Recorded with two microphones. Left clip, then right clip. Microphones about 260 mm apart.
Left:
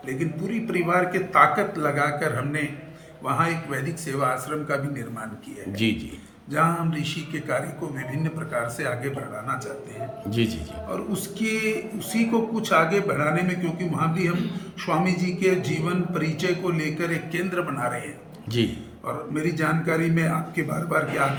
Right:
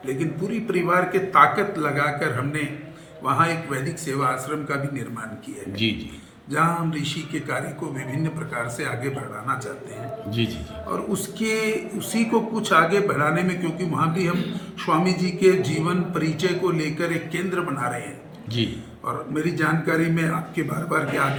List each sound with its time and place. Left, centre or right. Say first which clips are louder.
0.2 s a man's voice: right 2 dB; centre
6.5 s a man's voice: right 1 dB; centre